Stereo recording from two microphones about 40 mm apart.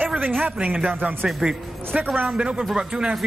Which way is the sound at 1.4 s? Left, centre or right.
Right.